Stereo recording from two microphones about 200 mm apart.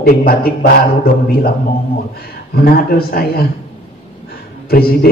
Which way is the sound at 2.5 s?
50° left (ahead or behind).